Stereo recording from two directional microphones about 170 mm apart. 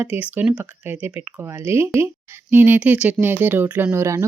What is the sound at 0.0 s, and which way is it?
Speech, 10° right (ahead or behind).